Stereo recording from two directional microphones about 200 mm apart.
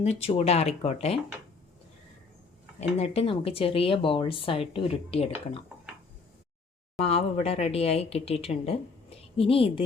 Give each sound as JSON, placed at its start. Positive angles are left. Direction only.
{"t": 0.0, "sound": "speech", "side_deg": 30}
{"t": 3.0, "sound": "speech", "side_deg": 30}
{"t": 7.0, "sound": "speech", "side_deg": 30}